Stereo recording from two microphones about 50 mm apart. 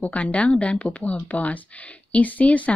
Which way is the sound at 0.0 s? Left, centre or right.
Left.